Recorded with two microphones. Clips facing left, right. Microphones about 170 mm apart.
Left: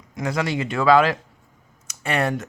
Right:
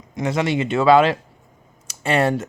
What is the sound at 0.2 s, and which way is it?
Speech, 25° right (ahead or behind).